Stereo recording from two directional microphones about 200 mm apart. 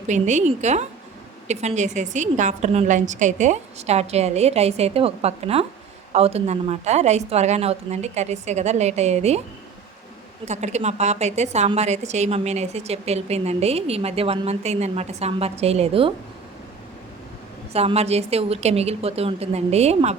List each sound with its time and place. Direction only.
0.1 s a woman's voice: 35° right (ahead or behind)
10.4 s a woman's voice: 35° right (ahead or behind)
17.7 s a woman's voice: 30° right (ahead or behind)